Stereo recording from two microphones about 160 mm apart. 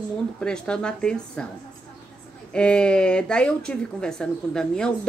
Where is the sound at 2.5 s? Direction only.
5° left (ahead or behind).